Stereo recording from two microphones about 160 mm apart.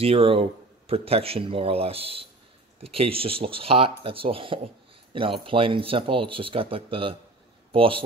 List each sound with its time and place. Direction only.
0.0 s speech: 35° right (ahead or behind)